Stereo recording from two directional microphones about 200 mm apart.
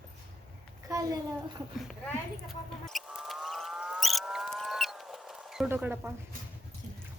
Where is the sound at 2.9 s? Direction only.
Centre (ahead or behind).